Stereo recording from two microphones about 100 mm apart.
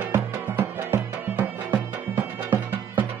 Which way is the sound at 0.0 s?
20° right (ahead or behind).